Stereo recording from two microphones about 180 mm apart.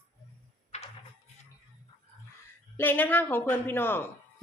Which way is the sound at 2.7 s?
10° left (ahead or behind).